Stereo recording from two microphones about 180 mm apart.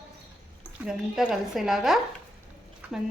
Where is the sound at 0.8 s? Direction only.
5° right (ahead or behind).